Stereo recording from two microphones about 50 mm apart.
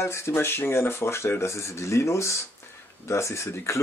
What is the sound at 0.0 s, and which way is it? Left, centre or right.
Speech, left.